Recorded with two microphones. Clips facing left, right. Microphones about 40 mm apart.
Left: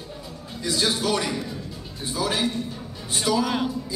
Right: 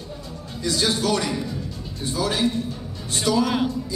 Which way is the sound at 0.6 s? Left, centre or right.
Centre.